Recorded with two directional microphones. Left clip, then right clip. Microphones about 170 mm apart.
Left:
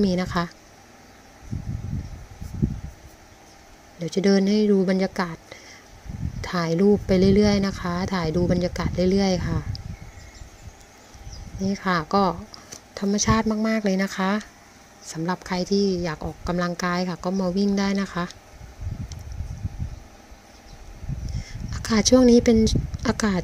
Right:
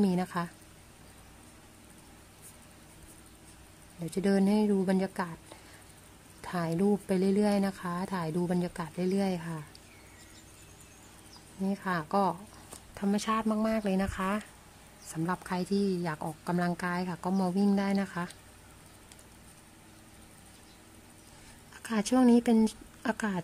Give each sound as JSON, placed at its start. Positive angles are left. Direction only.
{"t": 0.0, "sound": "speech", "side_deg": 15}
{"t": 4.0, "sound": "speech", "side_deg": 10}
{"t": 6.4, "sound": "speech", "side_deg": 15}
{"t": 11.7, "sound": "speech", "side_deg": 20}
{"t": 21.7, "sound": "speech", "side_deg": 20}